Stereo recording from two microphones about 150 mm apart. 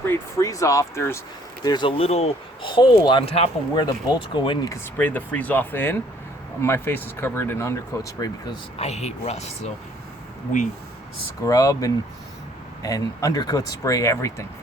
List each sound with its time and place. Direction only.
0.0 s speech: 20° left (ahead or behind)
1.6 s speech: 30° left (ahead or behind)
3.8 s speech: 30° left (ahead or behind)
4.7 s speech: 10° left (ahead or behind)
8.8 s speech: 45° left (ahead or behind)
11.4 s speech: 25° left (ahead or behind)